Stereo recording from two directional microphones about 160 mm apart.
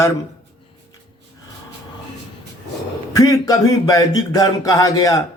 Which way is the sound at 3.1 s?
20° left (ahead or behind).